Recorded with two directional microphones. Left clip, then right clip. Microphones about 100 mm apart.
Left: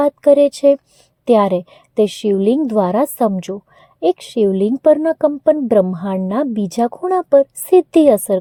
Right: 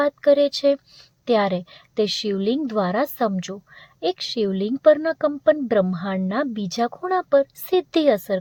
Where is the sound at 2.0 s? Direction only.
35° left (ahead or behind).